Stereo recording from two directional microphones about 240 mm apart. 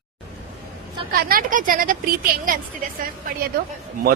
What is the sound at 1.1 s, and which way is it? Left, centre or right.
A man's voice, right.